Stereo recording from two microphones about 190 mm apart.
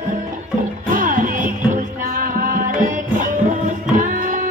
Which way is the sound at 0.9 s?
45° right (ahead or behind).